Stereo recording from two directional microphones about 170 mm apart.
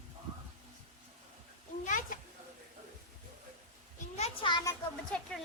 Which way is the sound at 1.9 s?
50° left (ahead or behind).